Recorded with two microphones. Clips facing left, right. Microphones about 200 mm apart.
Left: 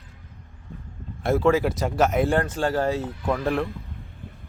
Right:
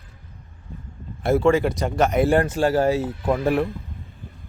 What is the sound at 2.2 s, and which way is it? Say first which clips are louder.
Speech: right 4 dB; 10° right (ahead or behind).